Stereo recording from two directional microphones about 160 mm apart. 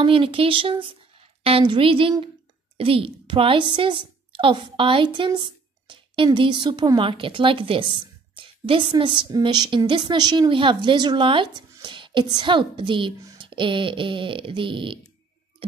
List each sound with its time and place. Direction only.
0.0 s a woman's voice: 35° right (ahead or behind)